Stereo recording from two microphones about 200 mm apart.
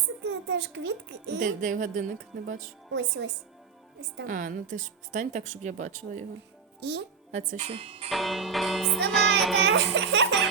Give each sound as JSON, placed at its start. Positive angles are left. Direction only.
{"t": 0.3, "sound": "a child's voice", "side_deg": -65}
{"t": 1.4, "sound": "speech", "side_deg": -40}
{"t": 2.9, "sound": "a child's voice", "side_deg": -60}
{"t": 4.3, "sound": "speech", "side_deg": -40}
{"t": 6.7, "sound": "a child's voice", "side_deg": -60}
{"t": 7.3, "sound": "speech", "side_deg": -35}
{"t": 8.1, "sound": "music", "side_deg": 0}
{"t": 9.6, "sound": "a child's voice", "side_deg": -60}